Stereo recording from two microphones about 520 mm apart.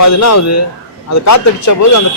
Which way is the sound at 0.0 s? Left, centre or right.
Left.